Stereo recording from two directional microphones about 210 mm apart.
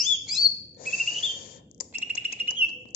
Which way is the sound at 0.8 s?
45° left (ahead or behind).